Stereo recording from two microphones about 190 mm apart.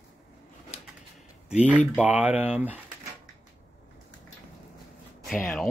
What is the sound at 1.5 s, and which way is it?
Speech, 5° right (ahead or behind).